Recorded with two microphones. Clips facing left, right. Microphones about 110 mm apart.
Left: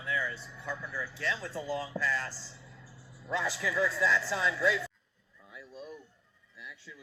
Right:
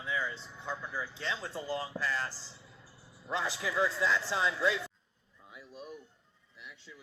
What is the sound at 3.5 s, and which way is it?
Speech, 25° right (ahead or behind).